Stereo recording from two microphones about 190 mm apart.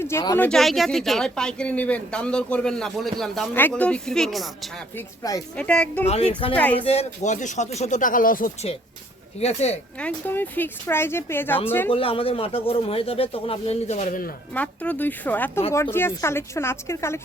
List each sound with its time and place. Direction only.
0.0 s speech: 15° left (ahead or behind)
4.9 s speech: 20° left (ahead or behind)
5.5 s speech: 5° left (ahead or behind)
6.1 s speech: 35° left (ahead or behind)
6.6 s speech: 10° left (ahead or behind)
6.8 s speech: 35° left (ahead or behind)
9.4 s speech: 35° left (ahead or behind)
10.0 s speech: 10° left (ahead or behind)
11.9 s speech: 30° left (ahead or behind); by 14.3 s 45° left (ahead or behind)
14.5 s speech: 10° left (ahead or behind)